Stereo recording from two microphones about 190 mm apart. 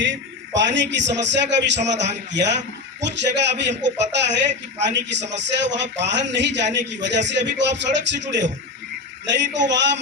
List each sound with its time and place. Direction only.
0.0 s speech: 75° right (ahead or behind)